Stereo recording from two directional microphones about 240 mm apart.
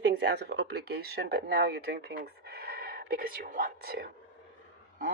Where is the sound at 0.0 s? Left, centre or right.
Right.